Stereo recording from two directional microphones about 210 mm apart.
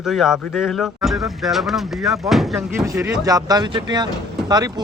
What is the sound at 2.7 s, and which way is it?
Speech, 15° right (ahead or behind).